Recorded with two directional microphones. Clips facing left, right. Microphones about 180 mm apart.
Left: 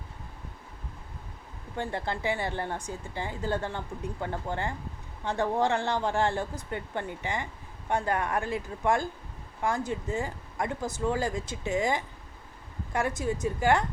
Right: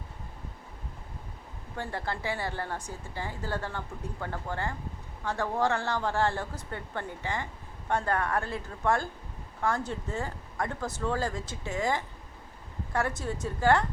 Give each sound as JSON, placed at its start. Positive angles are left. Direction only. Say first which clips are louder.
{"t": 1.7, "sound": "speech", "louder": "left 2 dB", "side_deg": 20}